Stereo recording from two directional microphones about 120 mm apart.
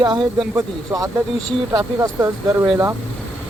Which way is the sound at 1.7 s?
25° right (ahead or behind).